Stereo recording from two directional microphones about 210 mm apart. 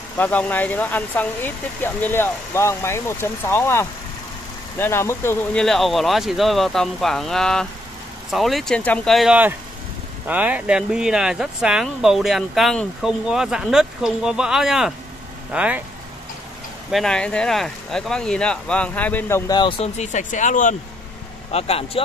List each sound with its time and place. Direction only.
0.2 s speech: 5° left (ahead or behind)
16.9 s speech: 5° left (ahead or behind); by 22.0 s 30° left (ahead or behind)